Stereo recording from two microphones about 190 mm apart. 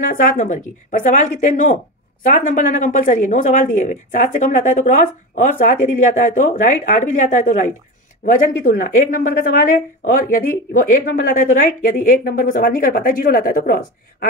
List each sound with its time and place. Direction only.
0.0 s speech: 45° left (ahead or behind)